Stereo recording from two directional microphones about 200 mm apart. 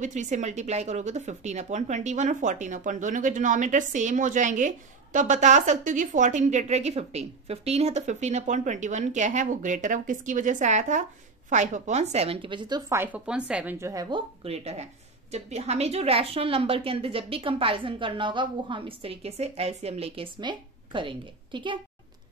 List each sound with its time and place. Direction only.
0.0 s speech: 35° right (ahead or behind); by 13.0 s 20° right (ahead or behind)
13.0 s a woman's voice: 5° right (ahead or behind); by 21.7 s 25° right (ahead or behind)